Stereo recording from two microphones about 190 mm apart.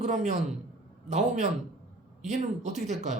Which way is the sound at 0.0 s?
40° right (ahead or behind).